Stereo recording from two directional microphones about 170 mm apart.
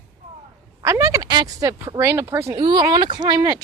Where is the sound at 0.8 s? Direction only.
20° right (ahead or behind).